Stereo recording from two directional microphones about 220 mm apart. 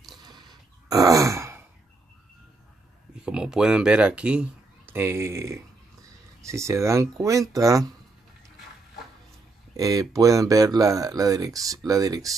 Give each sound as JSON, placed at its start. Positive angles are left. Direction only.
{"t": 0.2, "sound": "a sound", "side_deg": -20}
{"t": 3.2, "sound": "speech", "side_deg": -5}
{"t": 9.8, "sound": "speech", "side_deg": -15}